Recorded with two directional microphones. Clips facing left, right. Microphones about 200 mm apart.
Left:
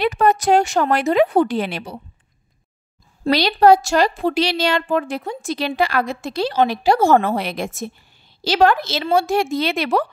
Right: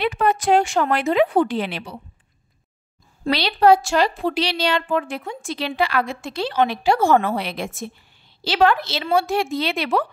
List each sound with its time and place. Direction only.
0.0 s speech: 40° left (ahead or behind)
3.3 s a woman's voice: 45° left (ahead or behind)